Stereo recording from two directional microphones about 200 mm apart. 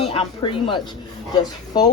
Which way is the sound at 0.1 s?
25° left (ahead or behind).